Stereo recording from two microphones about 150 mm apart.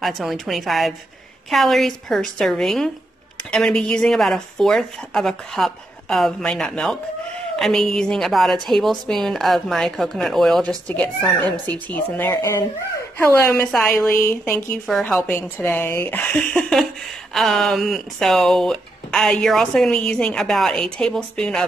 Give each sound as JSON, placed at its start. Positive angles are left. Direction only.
{"t": 0.0, "sound": "speech", "side_deg": 0}
{"t": 12.4, "sound": "a woman's voice", "side_deg": 20}
{"t": 14.0, "sound": "a woman's voice", "side_deg": 15}